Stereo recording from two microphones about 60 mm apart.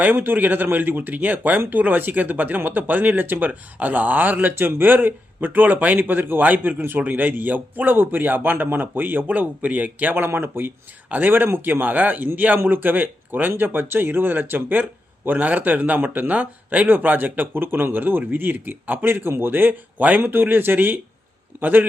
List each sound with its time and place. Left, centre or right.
0.0 s speech: right
10.2 s speech: right